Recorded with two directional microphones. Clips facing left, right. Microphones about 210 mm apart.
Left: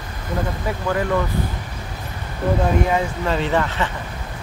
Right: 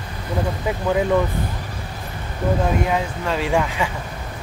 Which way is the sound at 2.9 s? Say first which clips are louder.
Left 2 dB; centre (ahead or behind).